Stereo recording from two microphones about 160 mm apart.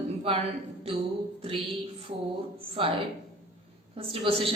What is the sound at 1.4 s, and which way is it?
A woman's voice, 35° right (ahead or behind).